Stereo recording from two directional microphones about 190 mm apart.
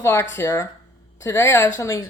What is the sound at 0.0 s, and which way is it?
Speech, 15° left (ahead or behind).